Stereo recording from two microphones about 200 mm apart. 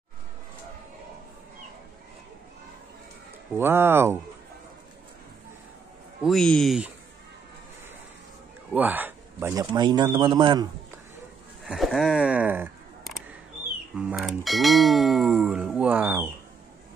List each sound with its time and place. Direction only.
3.5 s speech: 10° right (ahead or behind)
6.2 s speech: 5° left (ahead or behind)
8.7 s a man's voice: 10° right (ahead or behind)
11.6 s speech: centre (ahead or behind)
13.9 s speech: 5° right (ahead or behind)